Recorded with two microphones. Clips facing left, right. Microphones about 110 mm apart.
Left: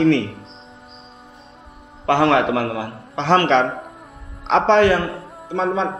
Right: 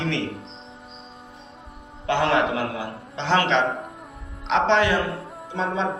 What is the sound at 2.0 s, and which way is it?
Speech, 75° left (ahead or behind).